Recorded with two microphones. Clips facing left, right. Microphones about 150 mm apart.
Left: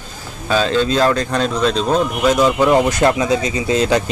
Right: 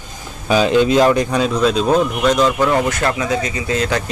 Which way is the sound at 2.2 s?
10° left (ahead or behind).